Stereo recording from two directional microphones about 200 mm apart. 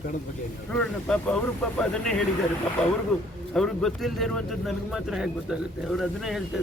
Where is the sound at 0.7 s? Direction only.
5° left (ahead or behind).